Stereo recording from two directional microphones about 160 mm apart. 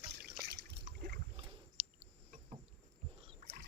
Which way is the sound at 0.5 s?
90° right.